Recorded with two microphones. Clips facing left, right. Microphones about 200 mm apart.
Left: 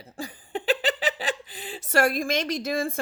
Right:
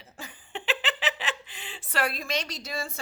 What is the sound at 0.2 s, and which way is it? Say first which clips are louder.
Speech: left 7 dB; 35° left (ahead or behind).